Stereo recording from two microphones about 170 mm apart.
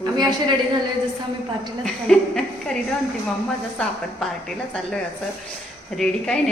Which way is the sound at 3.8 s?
5° left (ahead or behind).